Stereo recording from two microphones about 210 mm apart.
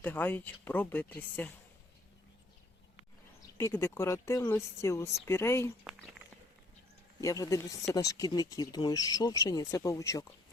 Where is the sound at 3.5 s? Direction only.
10° left (ahead or behind).